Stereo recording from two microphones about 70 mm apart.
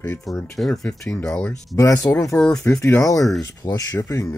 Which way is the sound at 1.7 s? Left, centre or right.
Left.